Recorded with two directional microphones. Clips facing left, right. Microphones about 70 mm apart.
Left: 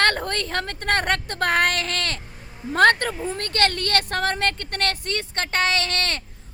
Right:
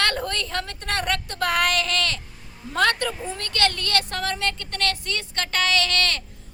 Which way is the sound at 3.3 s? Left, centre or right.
Left.